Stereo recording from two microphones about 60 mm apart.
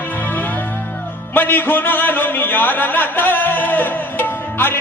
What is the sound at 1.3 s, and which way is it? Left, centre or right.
A man's voice, left.